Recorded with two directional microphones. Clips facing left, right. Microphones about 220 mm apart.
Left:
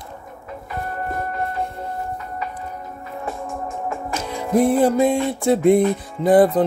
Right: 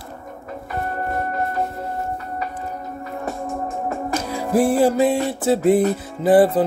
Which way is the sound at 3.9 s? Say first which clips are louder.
Right 3 dB; 40° right (ahead or behind).